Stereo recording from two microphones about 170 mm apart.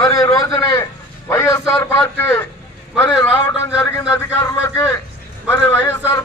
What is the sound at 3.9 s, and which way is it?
A man's voice, 15° left (ahead or behind).